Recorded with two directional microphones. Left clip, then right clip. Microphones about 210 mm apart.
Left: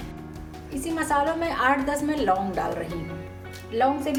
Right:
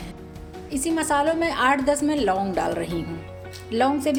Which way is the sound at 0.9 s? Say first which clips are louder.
Right 2 dB; 45° right (ahead or behind).